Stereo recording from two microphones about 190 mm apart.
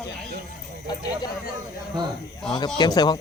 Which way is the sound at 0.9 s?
20° left (ahead or behind).